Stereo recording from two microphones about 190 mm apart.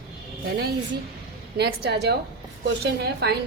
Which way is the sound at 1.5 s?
60° right (ahead or behind).